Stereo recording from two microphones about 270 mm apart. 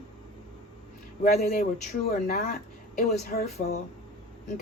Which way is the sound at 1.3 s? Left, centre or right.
Left.